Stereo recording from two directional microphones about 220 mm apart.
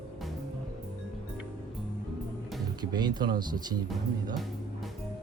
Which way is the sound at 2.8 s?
20° right (ahead or behind).